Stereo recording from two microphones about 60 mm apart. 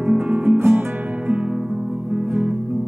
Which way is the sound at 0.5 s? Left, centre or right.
Right.